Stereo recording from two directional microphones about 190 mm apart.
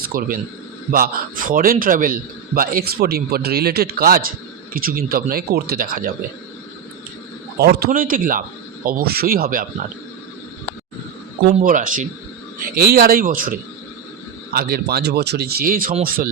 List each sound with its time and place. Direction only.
0.1 s a man's voice: 50° right (ahead or behind)
7.6 s a man's voice: 55° right (ahead or behind)
11.6 s a man's voice: 45° right (ahead or behind)